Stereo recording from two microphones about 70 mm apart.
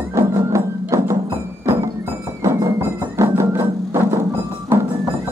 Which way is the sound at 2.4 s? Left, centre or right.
Right.